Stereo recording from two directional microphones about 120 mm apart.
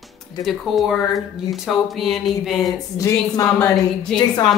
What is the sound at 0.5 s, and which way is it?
Speech, centre (ahead or behind).